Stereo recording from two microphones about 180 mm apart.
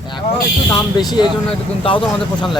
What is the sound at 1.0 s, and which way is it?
Speech, 25° left (ahead or behind).